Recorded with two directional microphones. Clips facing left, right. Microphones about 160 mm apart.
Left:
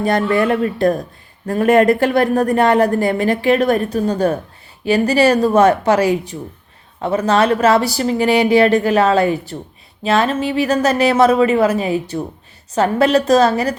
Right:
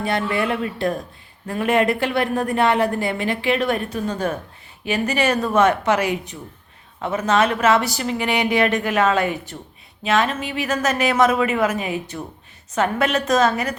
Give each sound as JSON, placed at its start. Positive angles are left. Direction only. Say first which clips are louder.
{"t": 0.0, "sound": "a woman's voice", "louder": "left 6 dB", "side_deg": 40}